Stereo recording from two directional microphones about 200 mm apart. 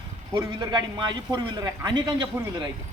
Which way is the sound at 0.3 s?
20° right (ahead or behind).